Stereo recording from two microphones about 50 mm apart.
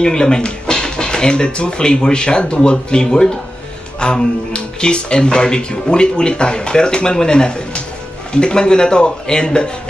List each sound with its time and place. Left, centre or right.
0.0 s speech: centre